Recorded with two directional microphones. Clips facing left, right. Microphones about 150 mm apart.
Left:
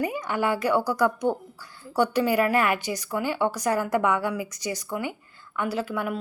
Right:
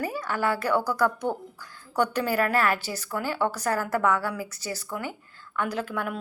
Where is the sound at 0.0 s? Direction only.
15° left (ahead or behind).